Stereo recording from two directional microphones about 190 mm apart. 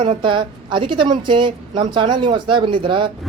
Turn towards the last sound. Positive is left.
turn(degrees=-25)  # may be behind; listen again after turning